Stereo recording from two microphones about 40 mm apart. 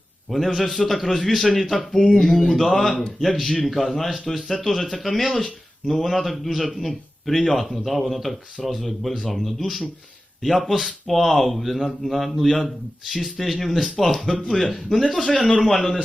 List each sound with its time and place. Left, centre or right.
0.3 s speech: centre
2.8 s speech: left
3.2 s speech: centre